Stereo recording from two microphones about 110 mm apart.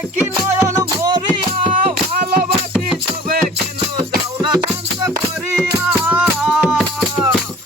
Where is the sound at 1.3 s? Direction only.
50° right (ahead or behind).